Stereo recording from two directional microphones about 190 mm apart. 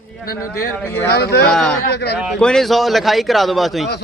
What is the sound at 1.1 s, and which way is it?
Speech, 60° left (ahead or behind).